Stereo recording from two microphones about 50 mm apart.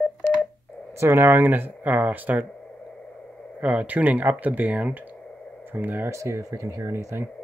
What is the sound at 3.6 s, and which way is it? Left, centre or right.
Speech, right.